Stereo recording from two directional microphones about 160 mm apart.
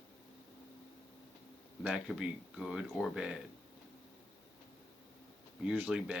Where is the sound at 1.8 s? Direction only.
5° right (ahead or behind).